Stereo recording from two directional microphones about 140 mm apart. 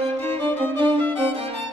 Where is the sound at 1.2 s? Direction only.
40° right (ahead or behind).